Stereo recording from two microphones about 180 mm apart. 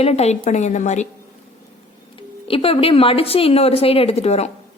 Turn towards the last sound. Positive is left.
turn(degrees=35)  # may be behind; listen again after turning